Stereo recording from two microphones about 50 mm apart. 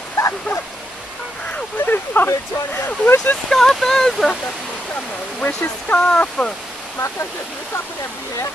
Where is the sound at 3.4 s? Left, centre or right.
Centre.